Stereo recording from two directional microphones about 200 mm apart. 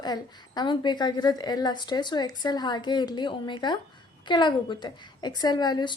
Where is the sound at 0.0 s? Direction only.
20° left (ahead or behind).